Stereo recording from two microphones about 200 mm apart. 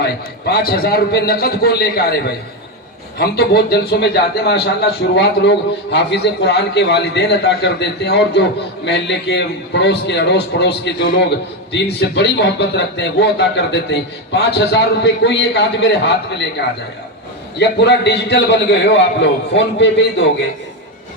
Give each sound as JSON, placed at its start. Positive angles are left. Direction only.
{"t": 0.0, "sound": "a man's voice", "side_deg": 50}
{"t": 3.2, "sound": "a man's voice", "side_deg": 50}
{"t": 17.6, "sound": "a man's voice", "side_deg": 55}